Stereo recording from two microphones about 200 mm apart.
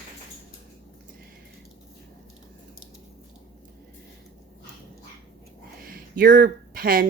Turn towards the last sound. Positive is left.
turn(degrees=-45)  # may be behind; listen again after turning